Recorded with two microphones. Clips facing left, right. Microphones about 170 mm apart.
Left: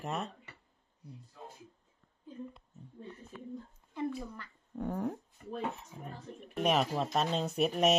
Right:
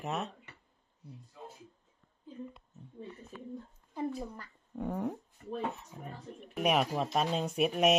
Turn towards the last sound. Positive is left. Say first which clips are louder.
# right 1 dB
turn(degrees=-5)  # may be behind; listen again after turning